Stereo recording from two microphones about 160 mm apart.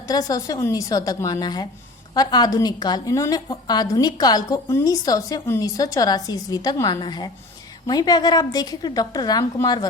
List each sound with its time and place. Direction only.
0.1 s a woman's voice: 20° left (ahead or behind)